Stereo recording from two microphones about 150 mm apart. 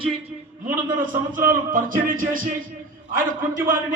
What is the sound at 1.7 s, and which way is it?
Music, 65° right (ahead or behind).